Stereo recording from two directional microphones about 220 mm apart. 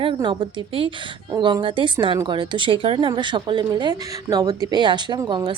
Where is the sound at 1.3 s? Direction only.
20° right (ahead or behind).